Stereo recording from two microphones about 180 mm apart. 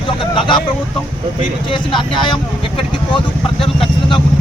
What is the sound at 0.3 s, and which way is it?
Speech, 25° left (ahead or behind).